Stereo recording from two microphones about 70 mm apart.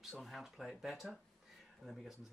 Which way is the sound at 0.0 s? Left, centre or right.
Centre.